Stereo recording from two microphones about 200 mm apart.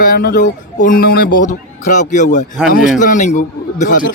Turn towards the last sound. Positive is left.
turn(degrees=40)  # may be behind; listen again after turning